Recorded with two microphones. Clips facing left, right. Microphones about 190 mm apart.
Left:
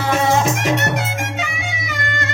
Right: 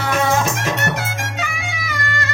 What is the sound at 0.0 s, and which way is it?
Music, 25° left (ahead or behind).